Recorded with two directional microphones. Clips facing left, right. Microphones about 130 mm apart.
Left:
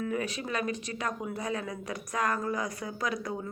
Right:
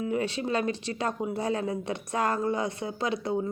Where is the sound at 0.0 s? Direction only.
25° right (ahead or behind).